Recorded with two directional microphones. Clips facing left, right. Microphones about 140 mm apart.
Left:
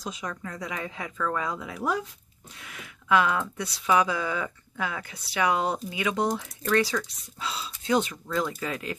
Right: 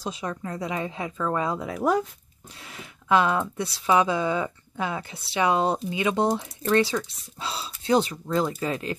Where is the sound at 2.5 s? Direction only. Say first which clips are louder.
Right 2 dB; 30° right (ahead or behind).